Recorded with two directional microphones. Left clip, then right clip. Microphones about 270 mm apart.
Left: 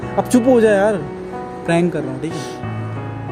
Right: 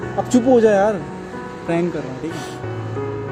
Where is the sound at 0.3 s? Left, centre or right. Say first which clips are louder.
Left 1 dB; left.